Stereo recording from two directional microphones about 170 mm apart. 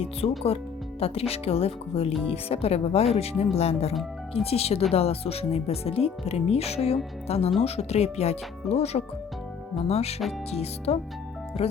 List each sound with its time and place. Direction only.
0.0 s speech: 35° left (ahead or behind)